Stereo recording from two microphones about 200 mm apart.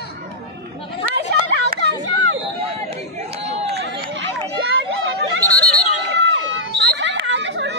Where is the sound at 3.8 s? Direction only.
65° right (ahead or behind).